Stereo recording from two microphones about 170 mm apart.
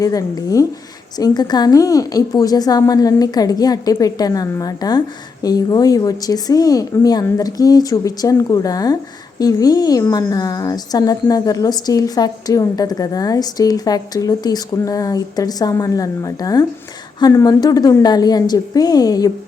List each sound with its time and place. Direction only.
0.0 s a woman's voice: 20° left (ahead or behind)